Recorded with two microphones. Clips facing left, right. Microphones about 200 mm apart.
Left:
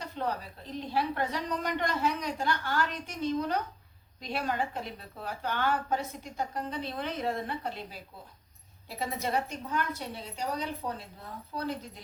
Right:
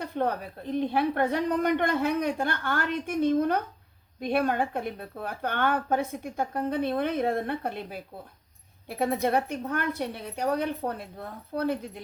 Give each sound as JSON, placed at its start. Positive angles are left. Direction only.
{"t": 0.0, "sound": "a woman's voice", "side_deg": -55}